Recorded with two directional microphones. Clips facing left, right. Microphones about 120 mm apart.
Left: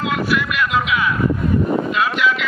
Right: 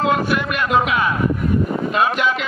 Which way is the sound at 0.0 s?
40° right (ahead or behind).